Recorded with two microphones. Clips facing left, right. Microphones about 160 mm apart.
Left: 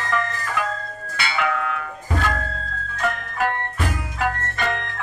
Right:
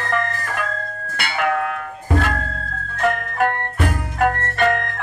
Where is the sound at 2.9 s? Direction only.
55° right (ahead or behind).